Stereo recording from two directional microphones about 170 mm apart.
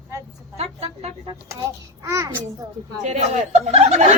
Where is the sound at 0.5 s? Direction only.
35° right (ahead or behind).